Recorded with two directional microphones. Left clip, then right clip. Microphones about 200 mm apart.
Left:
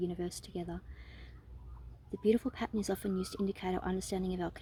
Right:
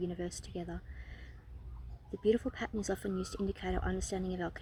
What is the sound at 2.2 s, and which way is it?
A woman's voice, 45° left (ahead or behind).